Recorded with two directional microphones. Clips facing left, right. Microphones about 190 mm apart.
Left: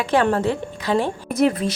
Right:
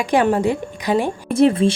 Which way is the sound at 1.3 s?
25° right (ahead or behind).